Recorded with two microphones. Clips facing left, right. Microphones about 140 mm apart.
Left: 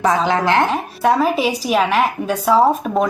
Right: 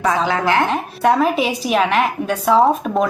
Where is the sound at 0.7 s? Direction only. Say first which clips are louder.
Even; centre (ahead or behind).